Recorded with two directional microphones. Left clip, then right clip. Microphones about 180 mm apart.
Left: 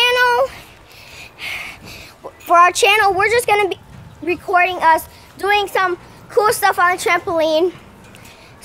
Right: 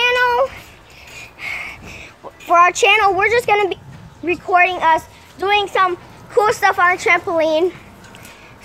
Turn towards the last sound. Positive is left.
turn(degrees=10)  # may be behind; listen again after turning